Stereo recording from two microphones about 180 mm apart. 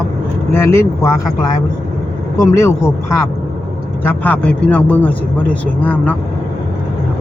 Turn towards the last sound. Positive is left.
turn(degrees=10)  # may be behind; listen again after turning